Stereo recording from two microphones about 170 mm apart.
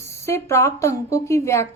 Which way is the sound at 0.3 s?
15° left (ahead or behind).